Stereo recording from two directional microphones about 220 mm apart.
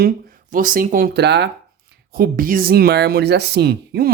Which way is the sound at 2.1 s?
40° right (ahead or behind).